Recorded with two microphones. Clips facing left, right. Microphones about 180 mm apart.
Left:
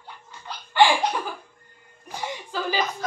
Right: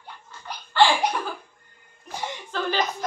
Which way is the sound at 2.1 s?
10° left (ahead or behind).